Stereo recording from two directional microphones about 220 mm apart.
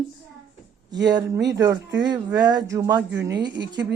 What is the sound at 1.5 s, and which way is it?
Speech, 55° right (ahead or behind).